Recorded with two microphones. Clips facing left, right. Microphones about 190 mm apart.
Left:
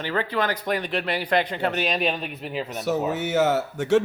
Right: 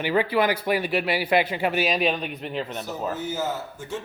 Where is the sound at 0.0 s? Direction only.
10° right (ahead or behind).